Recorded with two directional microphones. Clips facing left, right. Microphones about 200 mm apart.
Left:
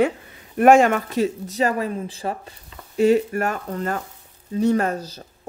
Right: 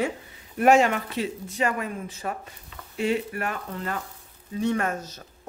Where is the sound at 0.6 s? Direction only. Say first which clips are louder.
Left 5 dB; 50° left (ahead or behind); by 2.3 s 30° left (ahead or behind).